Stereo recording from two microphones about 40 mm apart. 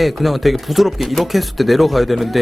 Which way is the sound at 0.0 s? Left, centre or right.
Centre.